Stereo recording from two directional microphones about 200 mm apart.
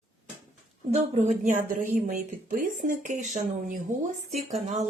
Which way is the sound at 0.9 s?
30° right (ahead or behind).